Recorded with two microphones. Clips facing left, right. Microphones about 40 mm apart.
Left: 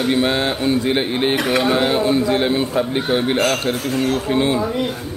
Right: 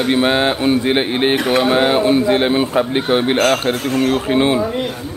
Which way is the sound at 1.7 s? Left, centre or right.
Right.